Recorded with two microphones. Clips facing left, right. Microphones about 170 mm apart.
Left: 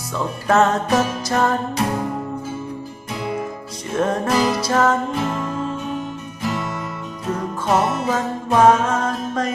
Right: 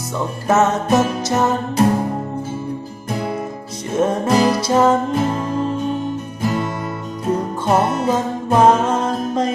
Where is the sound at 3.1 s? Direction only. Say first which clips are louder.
Right 3 dB; 45° right (ahead or behind).